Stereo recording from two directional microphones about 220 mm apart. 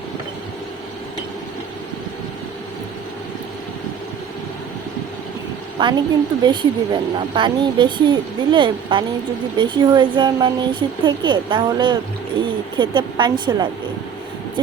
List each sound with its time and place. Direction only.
5.8 s speech: 20° right (ahead or behind)